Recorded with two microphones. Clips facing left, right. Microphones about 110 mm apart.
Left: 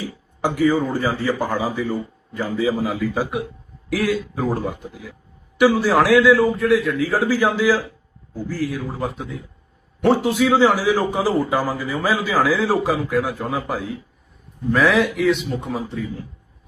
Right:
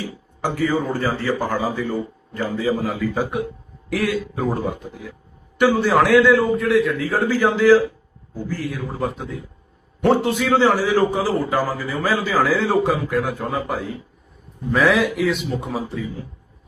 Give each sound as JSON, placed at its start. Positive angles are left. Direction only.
{"t": 0.9, "sound": "a man's voice", "side_deg": 15}